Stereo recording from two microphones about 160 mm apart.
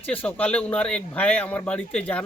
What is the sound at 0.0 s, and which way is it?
Speech, 10° left (ahead or behind).